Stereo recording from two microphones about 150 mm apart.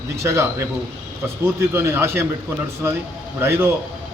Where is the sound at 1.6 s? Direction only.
15° right (ahead or behind).